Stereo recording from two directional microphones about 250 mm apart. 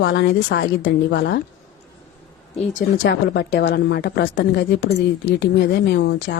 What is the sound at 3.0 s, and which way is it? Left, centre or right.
Speech, left.